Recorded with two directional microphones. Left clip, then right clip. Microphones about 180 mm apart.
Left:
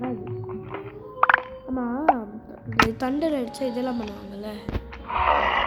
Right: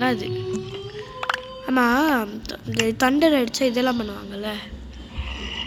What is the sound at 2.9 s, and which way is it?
A woman's voice, 5° right (ahead or behind).